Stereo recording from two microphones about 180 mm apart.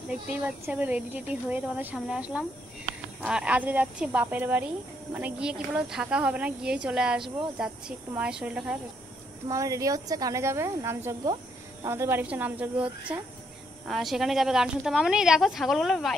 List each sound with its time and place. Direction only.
0.3 s a woman's voice: 10° right (ahead or behind)
9.5 s a woman's voice: 20° right (ahead or behind); by 16.2 s centre (ahead or behind)